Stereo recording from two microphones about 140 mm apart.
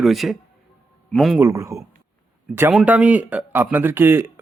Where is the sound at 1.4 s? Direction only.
20° right (ahead or behind).